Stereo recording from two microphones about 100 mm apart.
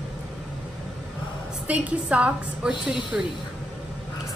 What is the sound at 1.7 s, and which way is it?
A woman's voice, 15° right (ahead or behind).